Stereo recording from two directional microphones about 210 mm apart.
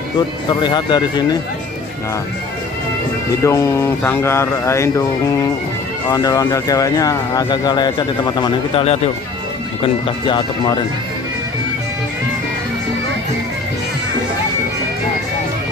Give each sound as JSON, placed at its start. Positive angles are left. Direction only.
{"t": 0.6, "sound": "speech", "side_deg": 20}
{"t": 3.4, "sound": "speech", "side_deg": 15}
{"t": 6.0, "sound": "speech", "side_deg": 15}
{"t": 10.0, "sound": "speech", "side_deg": 25}